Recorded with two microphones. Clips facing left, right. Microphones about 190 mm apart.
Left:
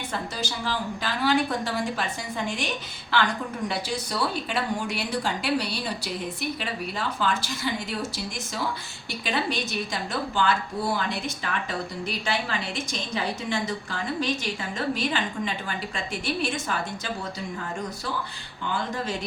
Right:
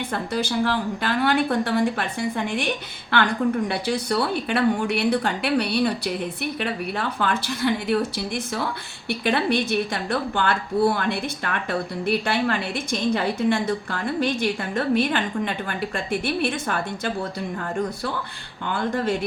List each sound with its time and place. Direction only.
0.1 s a woman's voice: 55° right (ahead or behind)
9.0 s a woman's voice: 60° right (ahead or behind)
18.6 s a woman's voice: 55° right (ahead or behind)